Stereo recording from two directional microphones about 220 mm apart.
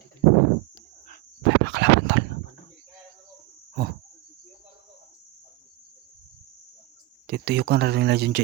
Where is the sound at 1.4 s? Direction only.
55° right (ahead or behind).